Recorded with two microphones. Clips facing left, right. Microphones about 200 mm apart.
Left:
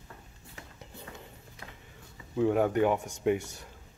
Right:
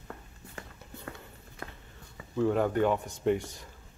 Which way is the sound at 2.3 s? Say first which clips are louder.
Left 1 dB; 10° left (ahead or behind).